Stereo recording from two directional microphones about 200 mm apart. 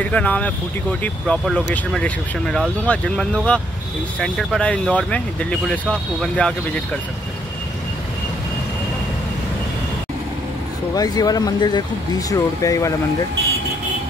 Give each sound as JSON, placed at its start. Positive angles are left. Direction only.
{"t": 0.0, "sound": "speech", "side_deg": 5}
{"t": 11.0, "sound": "speech", "side_deg": 20}